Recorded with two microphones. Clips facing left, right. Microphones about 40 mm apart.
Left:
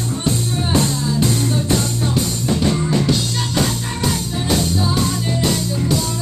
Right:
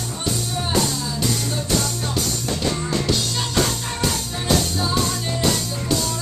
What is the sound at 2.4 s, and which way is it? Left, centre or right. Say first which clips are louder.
Music: left 5 dB; centre.